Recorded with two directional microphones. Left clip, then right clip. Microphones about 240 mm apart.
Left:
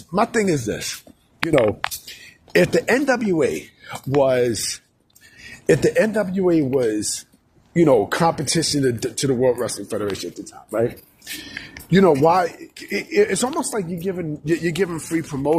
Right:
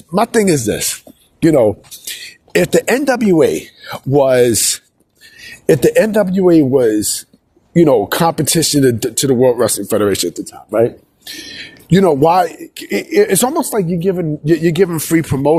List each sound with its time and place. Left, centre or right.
0.1 s speech: right
2.0 s speech: right
11.9 s speech: right